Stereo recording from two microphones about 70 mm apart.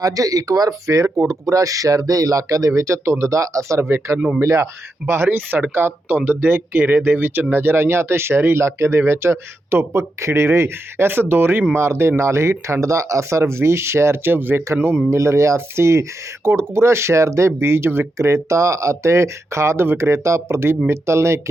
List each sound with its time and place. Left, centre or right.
0.0 s speech: right
15.1 s speech: right